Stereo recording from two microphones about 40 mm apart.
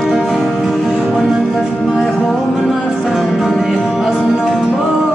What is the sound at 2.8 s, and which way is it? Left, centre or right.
Music, right.